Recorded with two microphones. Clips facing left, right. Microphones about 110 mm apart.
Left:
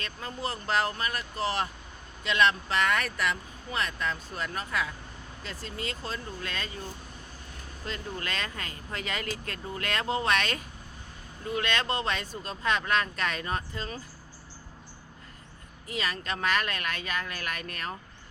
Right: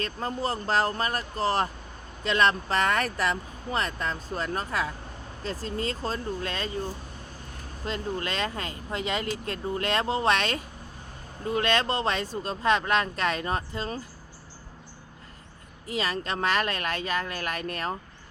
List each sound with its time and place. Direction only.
0.0 s speech: 35° right (ahead or behind)
7.9 s speech: 30° right (ahead or behind)
15.9 s speech: 30° right (ahead or behind)